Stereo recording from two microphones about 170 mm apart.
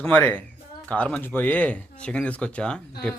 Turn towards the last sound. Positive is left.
turn(degrees=5)  # may be behind; listen again after turning